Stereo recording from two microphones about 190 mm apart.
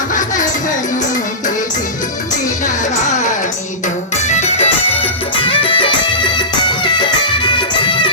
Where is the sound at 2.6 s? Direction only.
40° left (ahead or behind).